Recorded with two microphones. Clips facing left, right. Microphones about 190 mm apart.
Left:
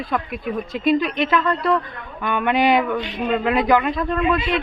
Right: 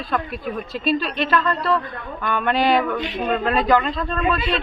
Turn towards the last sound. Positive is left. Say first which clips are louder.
# left 2 dB
turn(degrees=15)  # may be behind; listen again after turning